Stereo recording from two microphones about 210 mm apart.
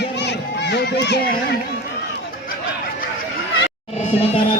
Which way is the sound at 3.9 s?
30° left (ahead or behind).